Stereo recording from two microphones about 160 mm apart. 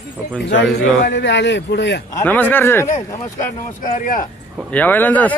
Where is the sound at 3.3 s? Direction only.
55° left (ahead or behind).